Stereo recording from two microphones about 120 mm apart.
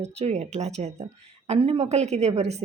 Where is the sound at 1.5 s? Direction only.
50° right (ahead or behind).